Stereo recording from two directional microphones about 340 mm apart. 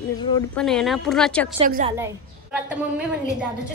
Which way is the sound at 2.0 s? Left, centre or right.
Centre.